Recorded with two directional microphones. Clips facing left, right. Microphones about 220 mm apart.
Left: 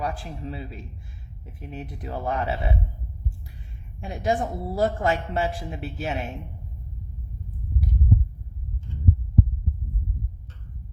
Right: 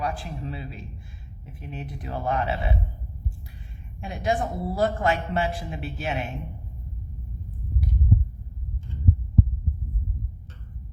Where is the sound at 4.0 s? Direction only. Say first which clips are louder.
Left 1 dB; 40° left (ahead or behind).